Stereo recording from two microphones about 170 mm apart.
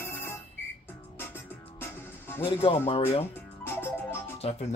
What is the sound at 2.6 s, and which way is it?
Speech, 30° left (ahead or behind).